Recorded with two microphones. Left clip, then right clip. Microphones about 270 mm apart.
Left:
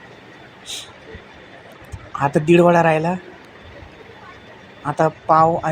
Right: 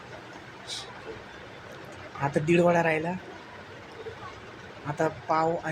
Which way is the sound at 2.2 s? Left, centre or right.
Left.